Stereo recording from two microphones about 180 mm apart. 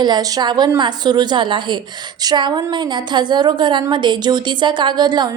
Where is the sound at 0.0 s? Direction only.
20° right (ahead or behind).